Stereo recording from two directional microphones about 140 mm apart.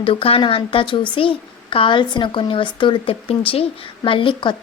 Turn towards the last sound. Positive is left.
turn(degrees=40)  # may be behind; listen again after turning